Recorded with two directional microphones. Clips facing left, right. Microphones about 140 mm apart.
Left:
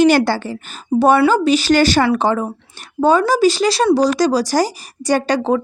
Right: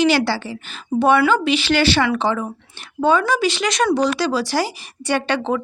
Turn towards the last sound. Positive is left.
turn(degrees=40)  # may be behind; listen again after turning